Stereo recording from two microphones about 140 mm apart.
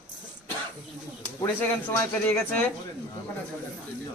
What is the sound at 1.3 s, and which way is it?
A man's voice, 15° left (ahead or behind).